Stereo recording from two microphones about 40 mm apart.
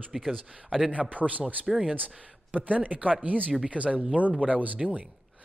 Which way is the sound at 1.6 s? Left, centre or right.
Centre.